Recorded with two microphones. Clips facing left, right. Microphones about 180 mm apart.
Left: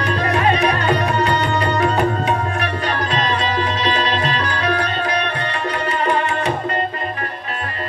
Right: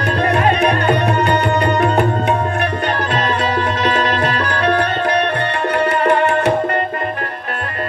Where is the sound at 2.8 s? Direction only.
55° right (ahead or behind).